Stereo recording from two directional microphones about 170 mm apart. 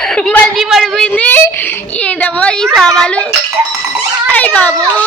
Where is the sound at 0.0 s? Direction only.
5° left (ahead or behind).